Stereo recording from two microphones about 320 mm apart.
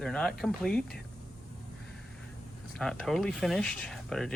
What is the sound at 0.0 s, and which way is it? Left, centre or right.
Speech, centre.